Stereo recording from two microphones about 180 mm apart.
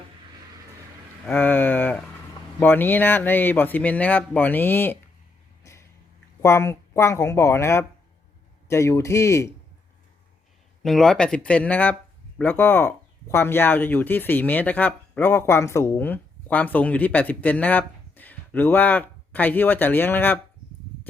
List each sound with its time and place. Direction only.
1.3 s speech: 10° left (ahead or behind)
5.6 s a sound: 15° left (ahead or behind)
6.4 s speech: 15° left (ahead or behind)
10.8 s speech: centre (ahead or behind)